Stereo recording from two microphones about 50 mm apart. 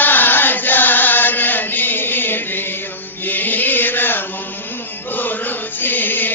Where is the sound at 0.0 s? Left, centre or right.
Left.